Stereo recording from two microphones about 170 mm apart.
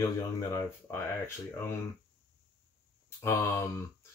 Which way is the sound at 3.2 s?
15° left (ahead or behind).